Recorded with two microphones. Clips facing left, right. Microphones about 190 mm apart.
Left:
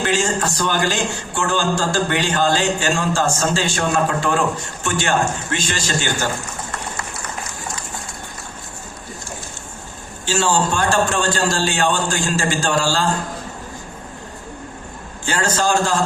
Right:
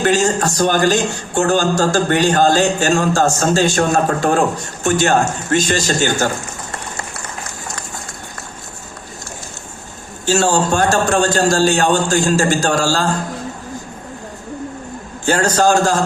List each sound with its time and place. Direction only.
0.0 s a man's voice: 40° right (ahead or behind)
10.2 s a man's voice: 45° right (ahead or behind)
15.3 s a man's voice: 45° right (ahead or behind)